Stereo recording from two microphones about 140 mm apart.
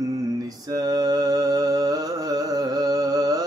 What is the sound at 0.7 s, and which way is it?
Music, 25° right (ahead or behind).